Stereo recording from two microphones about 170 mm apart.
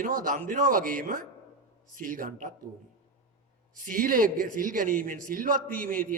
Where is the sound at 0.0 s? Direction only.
55° right (ahead or behind).